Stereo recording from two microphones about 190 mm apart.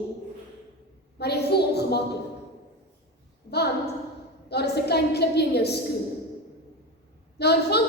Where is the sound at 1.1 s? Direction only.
60° left (ahead or behind).